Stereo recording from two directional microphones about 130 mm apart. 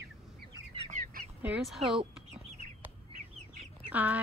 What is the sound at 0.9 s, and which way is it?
Duck, 70° right (ahead or behind).